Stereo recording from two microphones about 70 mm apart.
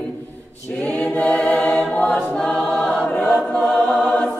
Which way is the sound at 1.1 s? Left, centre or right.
Left.